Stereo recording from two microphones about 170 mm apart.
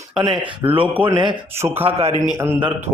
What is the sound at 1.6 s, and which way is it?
Speech, 15° right (ahead or behind).